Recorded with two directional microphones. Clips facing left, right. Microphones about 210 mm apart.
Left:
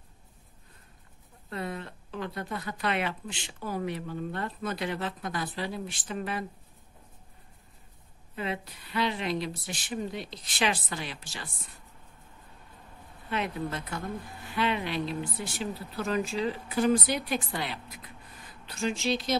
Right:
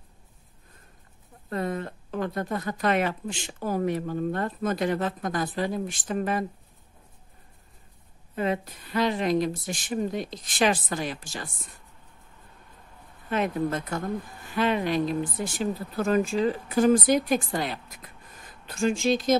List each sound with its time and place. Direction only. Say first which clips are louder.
1.5 s speech: right 6 dB; 45° right (ahead or behind)
8.4 s speech: right 7 dB; 45° right (ahead or behind)
13.3 s speech: right 6 dB; 45° right (ahead or behind)